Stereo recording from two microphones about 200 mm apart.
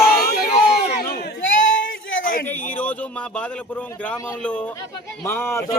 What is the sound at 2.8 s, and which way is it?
Speech, 5° left (ahead or behind).